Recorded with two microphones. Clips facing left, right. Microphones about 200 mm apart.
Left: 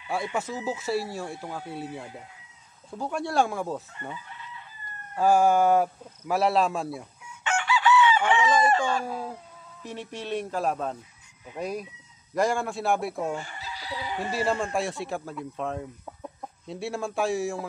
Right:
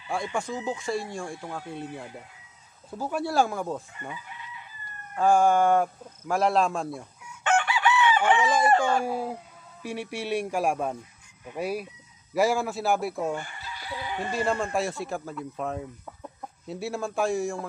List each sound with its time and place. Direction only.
0.1 s speech: 5° left (ahead or behind)
5.1 s speech: 5° left (ahead or behind)
7.4 s chicken: 55° right (ahead or behind)
8.5 s speech: 10° right (ahead or behind)
13.4 s chicken: 55° right (ahead or behind)
14.0 s speech: centre (ahead or behind)
16.1 s chicken: 5° left (ahead or behind)
16.6 s speech: centre (ahead or behind)